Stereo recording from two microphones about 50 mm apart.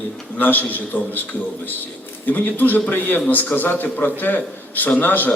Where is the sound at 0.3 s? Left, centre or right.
Left.